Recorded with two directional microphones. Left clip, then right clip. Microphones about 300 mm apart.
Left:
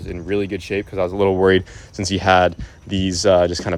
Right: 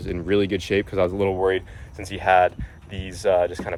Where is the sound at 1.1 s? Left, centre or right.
Left.